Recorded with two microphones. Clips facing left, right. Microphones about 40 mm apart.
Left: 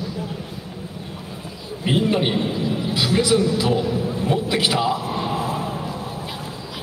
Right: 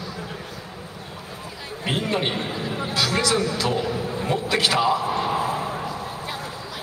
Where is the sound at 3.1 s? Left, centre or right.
Right.